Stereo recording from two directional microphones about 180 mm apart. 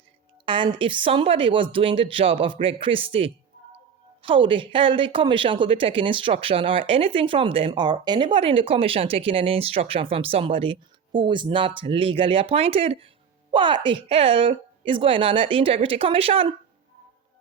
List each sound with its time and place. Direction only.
0.4 s a woman's voice: 30° right (ahead or behind)